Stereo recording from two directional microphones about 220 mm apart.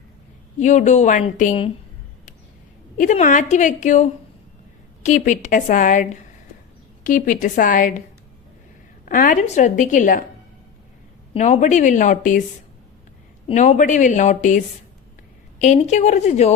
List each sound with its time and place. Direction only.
0.6 s a woman's voice: 35° left (ahead or behind)
3.0 s a woman's voice: 35° left (ahead or behind)
9.0 s a woman's voice: 40° left (ahead or behind)
11.3 s a woman's voice: 30° left (ahead or behind)
13.5 s a woman's voice: 35° left (ahead or behind)